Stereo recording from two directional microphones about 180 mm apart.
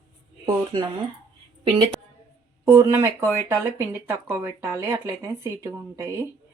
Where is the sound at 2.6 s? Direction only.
15° right (ahead or behind).